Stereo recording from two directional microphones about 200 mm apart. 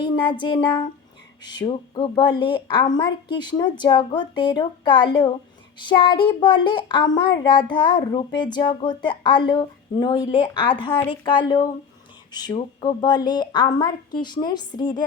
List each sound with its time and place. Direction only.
0.0 s speech: 25° left (ahead or behind)